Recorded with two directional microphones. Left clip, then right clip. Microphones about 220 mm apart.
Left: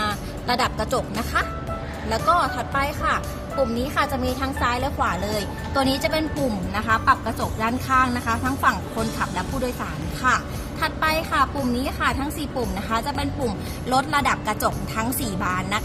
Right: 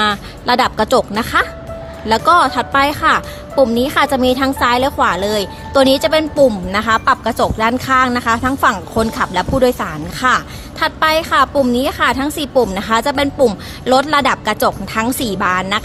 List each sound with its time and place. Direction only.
0.0 s a woman's voice: 40° right (ahead or behind)